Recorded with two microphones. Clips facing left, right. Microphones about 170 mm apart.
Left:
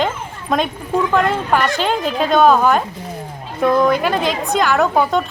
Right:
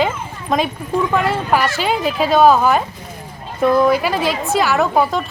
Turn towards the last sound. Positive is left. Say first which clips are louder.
# left 1 dB
turn(degrees=0)  # may be behind; listen again after turning